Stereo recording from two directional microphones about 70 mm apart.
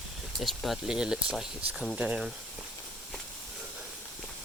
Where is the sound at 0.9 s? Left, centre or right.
Centre.